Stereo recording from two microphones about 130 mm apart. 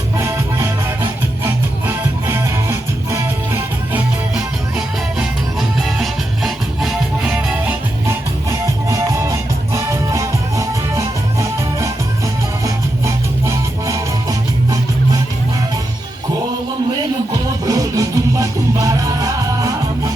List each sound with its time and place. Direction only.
0.2 s music: 20° right (ahead or behind)
5.2 s music: 5° right (ahead or behind)
7.3 s music: 15° right (ahead or behind)
8.4 s music: 25° right (ahead or behind)
17.7 s music: 25° right (ahead or behind)